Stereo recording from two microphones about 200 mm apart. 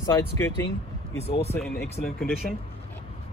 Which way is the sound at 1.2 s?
30° left (ahead or behind).